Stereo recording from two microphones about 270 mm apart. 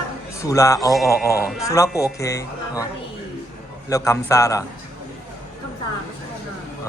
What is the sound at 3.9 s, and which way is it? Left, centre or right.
Speech, centre.